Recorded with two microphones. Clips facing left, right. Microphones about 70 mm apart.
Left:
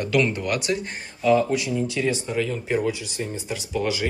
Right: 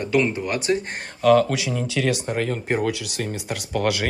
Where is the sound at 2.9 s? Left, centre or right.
Right.